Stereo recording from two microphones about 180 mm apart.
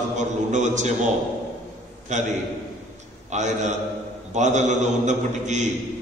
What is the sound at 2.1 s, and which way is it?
Speech, 40° right (ahead or behind).